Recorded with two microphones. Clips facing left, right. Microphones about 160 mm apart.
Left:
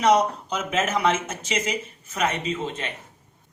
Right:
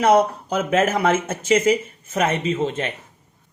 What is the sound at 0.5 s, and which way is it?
Speech, 55° right (ahead or behind).